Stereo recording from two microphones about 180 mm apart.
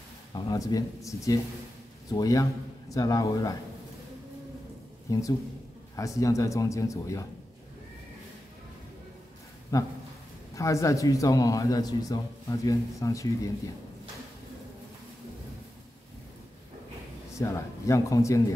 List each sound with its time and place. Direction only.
0.3 s a man's voice: 20° left (ahead or behind)
5.1 s a man's voice: 15° left (ahead or behind)
9.7 s a man's voice: 20° left (ahead or behind)
17.3 s a man's voice: 15° left (ahead or behind)